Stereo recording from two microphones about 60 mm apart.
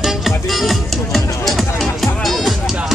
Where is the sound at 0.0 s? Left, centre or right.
Centre.